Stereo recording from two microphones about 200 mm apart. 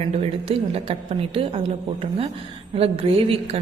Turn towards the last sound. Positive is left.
turn(degrees=-30)  # may be behind; listen again after turning